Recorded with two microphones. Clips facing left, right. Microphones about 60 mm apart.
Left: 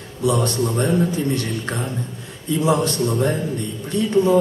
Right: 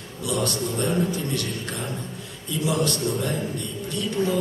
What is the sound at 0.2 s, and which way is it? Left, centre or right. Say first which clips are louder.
A man's voice: left 6 dB; left.